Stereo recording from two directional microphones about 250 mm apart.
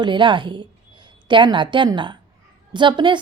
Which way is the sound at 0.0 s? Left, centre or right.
Centre.